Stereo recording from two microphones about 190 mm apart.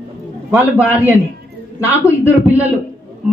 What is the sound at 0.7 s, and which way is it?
Speech, 10° right (ahead or behind).